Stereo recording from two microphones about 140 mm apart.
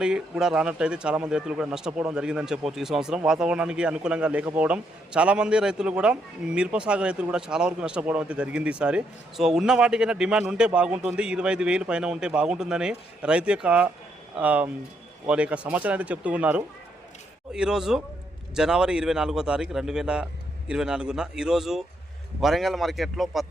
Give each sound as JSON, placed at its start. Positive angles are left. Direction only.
{"t": 0.0, "sound": "a man's voice", "side_deg": -5}